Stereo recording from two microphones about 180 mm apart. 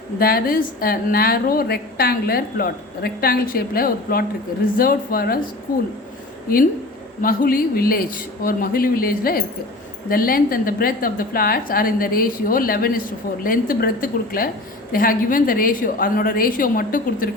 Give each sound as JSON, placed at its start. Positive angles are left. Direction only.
{"t": 0.2, "sound": "a woman's voice", "side_deg": 55}
{"t": 7.2, "sound": "a woman's voice", "side_deg": 50}